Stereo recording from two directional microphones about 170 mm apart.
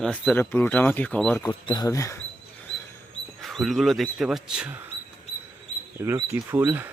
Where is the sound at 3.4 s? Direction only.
Centre (ahead or behind).